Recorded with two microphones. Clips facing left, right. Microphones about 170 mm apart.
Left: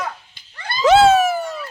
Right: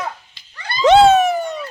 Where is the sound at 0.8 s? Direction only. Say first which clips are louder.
Right 2 dB; 5° left (ahead or behind).